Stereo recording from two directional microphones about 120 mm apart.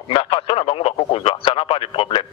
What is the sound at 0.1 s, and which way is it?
A man's voice, 50° left (ahead or behind).